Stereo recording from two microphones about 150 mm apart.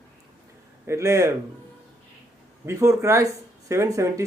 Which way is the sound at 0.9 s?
20° right (ahead or behind).